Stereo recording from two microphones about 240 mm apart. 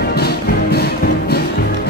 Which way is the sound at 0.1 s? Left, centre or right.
Left.